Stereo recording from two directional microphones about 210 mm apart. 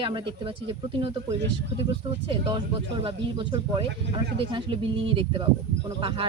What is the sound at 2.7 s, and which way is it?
Speech, 25° right (ahead or behind).